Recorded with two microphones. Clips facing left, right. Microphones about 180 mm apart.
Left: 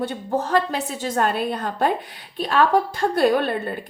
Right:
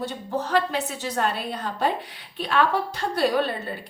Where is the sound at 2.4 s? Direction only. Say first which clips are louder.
Left 4 dB; 45° left (ahead or behind).